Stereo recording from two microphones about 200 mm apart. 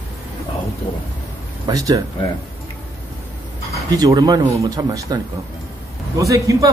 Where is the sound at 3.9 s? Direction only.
20° right (ahead or behind).